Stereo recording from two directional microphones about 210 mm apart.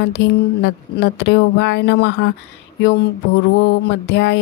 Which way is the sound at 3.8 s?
55° left (ahead or behind).